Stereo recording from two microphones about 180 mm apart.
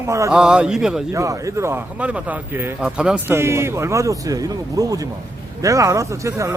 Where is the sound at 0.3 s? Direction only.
5° right (ahead or behind).